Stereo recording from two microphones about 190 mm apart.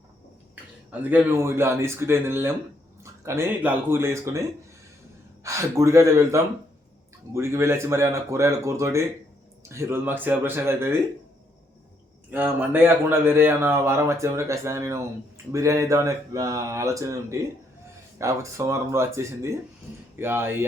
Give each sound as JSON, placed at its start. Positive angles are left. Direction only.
{"t": 0.9, "sound": "speech", "side_deg": -10}
{"t": 12.3, "sound": "speech", "side_deg": -10}